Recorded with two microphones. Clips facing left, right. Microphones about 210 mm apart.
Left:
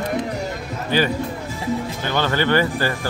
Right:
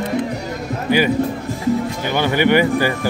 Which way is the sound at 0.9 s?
10° right (ahead or behind).